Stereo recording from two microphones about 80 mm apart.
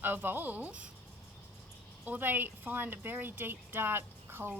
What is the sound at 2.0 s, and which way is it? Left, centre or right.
A woman's voice, right.